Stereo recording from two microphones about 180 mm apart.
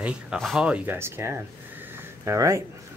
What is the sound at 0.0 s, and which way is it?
Speech, 5° right (ahead or behind).